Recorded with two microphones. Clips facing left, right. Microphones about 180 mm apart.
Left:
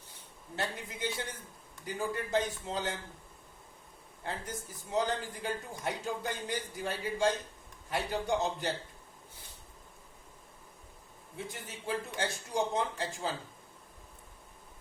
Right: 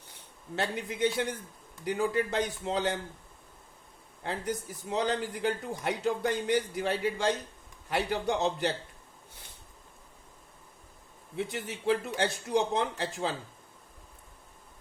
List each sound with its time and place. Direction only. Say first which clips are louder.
0.5 s speech: right 5 dB; 70° right (ahead or behind)
4.2 s speech: right 6 dB; 70° right (ahead or behind)
11.3 s speech: right 8 dB; 70° right (ahead or behind)